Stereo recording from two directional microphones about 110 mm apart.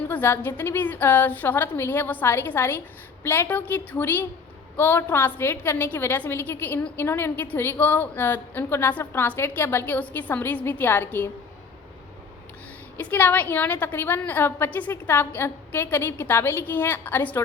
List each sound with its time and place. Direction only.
0.1 s a woman's voice: 20° left (ahead or behind)
13.0 s a woman's voice: 15° left (ahead or behind)